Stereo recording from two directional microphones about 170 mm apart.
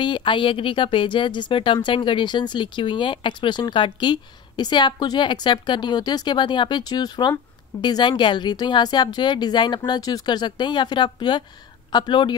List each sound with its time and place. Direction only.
0.0 s speech: 30° left (ahead or behind)